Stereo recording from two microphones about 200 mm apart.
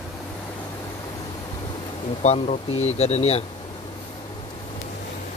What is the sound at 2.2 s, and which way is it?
Speech, 35° left (ahead or behind).